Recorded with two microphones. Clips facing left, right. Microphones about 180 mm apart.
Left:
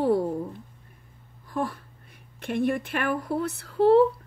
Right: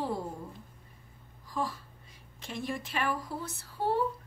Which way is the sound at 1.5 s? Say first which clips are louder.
Left 5 dB; 60° left (ahead or behind).